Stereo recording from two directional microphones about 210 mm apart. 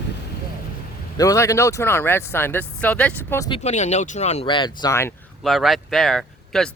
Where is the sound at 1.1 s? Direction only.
15° left (ahead or behind).